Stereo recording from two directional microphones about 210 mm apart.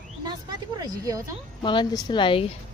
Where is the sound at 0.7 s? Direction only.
15° right (ahead or behind).